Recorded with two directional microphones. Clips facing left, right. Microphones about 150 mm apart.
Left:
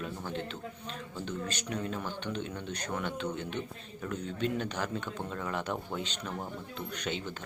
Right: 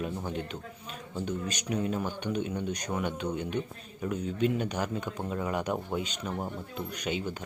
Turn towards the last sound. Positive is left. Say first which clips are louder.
# right 3 dB
turn(degrees=-10)  # may be behind; listen again after turning